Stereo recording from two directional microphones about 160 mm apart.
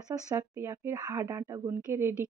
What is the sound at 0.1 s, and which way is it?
Speech, 20° right (ahead or behind).